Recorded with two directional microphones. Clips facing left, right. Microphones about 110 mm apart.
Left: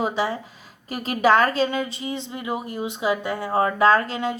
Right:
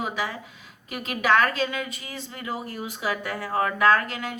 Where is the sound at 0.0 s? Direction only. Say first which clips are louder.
Left 6 dB; 30° left (ahead or behind).